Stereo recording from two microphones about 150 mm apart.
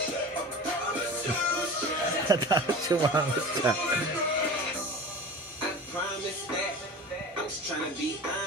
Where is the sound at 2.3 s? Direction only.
25° right (ahead or behind).